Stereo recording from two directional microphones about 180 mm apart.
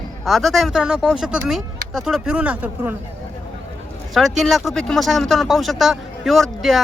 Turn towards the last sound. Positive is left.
turn(degrees=0)  # may be behind; listen again after turning